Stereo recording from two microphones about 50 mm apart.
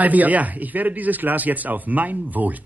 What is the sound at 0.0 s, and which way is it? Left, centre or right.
Speech, right.